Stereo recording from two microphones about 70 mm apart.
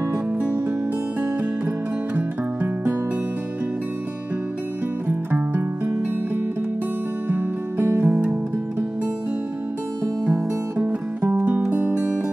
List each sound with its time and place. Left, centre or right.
2.1 s music: right
5.0 s music: right
8.0 s music: centre
10.8 s music: right